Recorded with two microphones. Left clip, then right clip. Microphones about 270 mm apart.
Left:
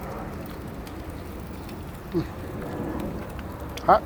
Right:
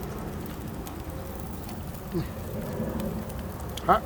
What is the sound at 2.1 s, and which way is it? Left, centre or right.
Speech, centre.